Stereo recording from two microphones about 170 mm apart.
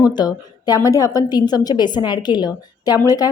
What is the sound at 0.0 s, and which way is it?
A woman's voice, 25° left (ahead or behind).